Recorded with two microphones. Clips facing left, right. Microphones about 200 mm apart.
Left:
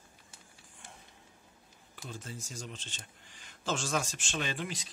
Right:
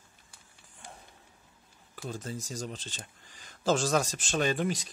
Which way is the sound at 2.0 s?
40° right (ahead or behind).